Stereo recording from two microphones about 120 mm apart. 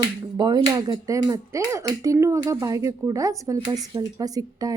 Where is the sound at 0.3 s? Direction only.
35° right (ahead or behind).